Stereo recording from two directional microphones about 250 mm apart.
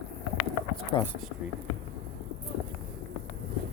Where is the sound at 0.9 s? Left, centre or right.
Left.